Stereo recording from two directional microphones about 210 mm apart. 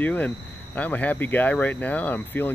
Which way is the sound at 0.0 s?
10° left (ahead or behind).